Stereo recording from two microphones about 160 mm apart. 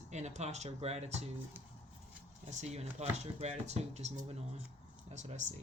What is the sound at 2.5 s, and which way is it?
Speech, 45° right (ahead or behind).